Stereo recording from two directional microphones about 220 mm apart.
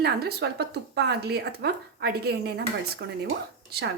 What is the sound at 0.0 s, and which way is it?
Speech, 45° right (ahead or behind).